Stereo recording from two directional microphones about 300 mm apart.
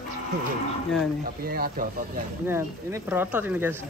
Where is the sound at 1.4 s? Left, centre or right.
Right.